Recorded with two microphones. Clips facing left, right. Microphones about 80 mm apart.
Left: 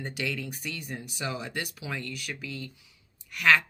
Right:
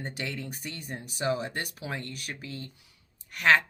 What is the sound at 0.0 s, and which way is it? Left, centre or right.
Speech, right.